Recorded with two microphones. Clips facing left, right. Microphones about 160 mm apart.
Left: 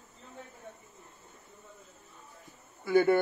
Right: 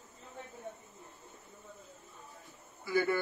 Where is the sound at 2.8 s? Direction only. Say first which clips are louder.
Left 7 dB; 55° left (ahead or behind).